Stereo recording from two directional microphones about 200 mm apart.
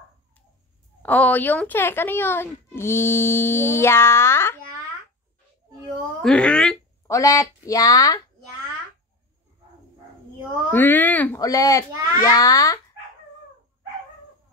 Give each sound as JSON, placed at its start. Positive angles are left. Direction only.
{"t": 1.0, "sound": "speech", "side_deg": 10}
{"t": 6.2, "sound": "speech", "side_deg": 5}
{"t": 7.1, "sound": "speech", "side_deg": 15}
{"t": 10.7, "sound": "speech", "side_deg": 10}